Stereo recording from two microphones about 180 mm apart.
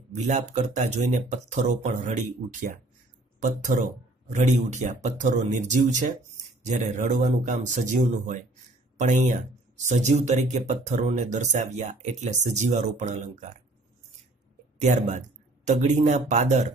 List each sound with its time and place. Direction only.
0.1 s speech: 40° right (ahead or behind)
14.8 s speech: 40° right (ahead or behind)